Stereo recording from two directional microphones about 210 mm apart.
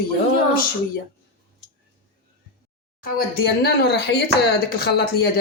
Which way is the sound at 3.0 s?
45° left (ahead or behind).